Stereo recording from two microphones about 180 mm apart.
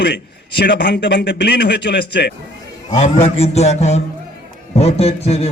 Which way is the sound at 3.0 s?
35° left (ahead or behind).